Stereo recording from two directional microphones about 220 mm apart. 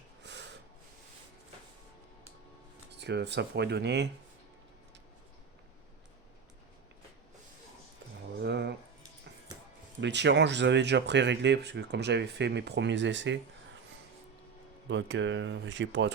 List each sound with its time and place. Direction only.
0.2 s snort: 50° right (ahead or behind)
3.0 s speech: 50° right (ahead or behind)
8.4 s a sound: 50° right (ahead or behind)
10.0 s speech: 55° right (ahead or behind)
14.8 s speech: 55° right (ahead or behind)